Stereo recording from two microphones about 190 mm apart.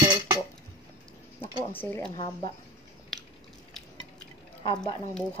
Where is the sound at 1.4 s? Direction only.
10° left (ahead or behind).